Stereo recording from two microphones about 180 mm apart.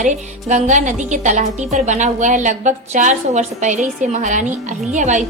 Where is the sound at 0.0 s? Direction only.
40° right (ahead or behind).